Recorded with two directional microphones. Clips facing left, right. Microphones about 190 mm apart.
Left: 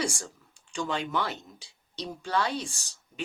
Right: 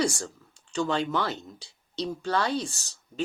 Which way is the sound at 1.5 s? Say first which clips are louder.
Right 7 dB; 10° left (ahead or behind).